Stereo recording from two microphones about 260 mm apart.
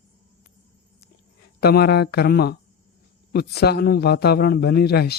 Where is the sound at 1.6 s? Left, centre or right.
Left.